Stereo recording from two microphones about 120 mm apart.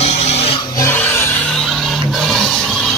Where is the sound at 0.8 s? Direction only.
20° left (ahead or behind).